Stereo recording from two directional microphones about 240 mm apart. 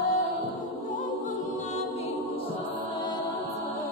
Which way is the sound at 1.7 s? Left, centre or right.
Left.